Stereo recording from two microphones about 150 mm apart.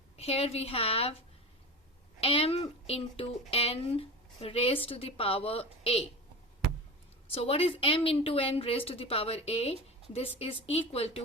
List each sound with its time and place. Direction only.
0.2 s a woman's voice: 45° left (ahead or behind)
2.2 s a woman's voice: 40° left (ahead or behind)
7.3 s a woman's voice: 40° left (ahead or behind)